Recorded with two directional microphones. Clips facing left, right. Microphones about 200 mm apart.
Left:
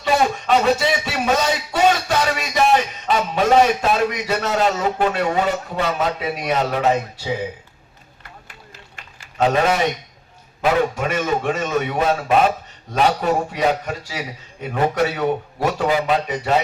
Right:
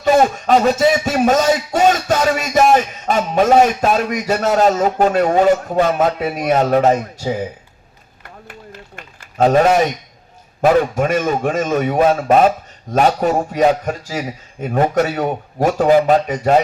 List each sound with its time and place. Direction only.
0.0 s speech: 45° right (ahead or behind)
8.4 s a sound: 50° right (ahead or behind)
10.6 s a man's voice: 45° right (ahead or behind)